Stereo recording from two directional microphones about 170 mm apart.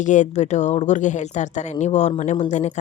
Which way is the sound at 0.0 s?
45° left (ahead or behind).